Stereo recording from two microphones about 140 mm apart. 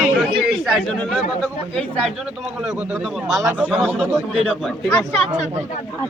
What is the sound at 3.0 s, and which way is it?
Speech, centre (ahead or behind).